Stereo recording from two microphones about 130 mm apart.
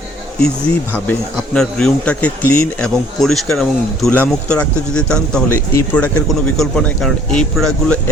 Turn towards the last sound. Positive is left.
turn(degrees=5)  # may be behind; listen again after turning